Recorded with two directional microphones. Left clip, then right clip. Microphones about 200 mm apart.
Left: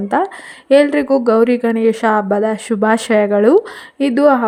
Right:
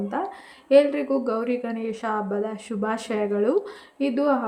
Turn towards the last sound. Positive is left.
turn(degrees=40)  # may be behind; listen again after turning